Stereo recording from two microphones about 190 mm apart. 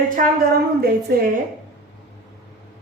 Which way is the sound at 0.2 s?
45° right (ahead or behind).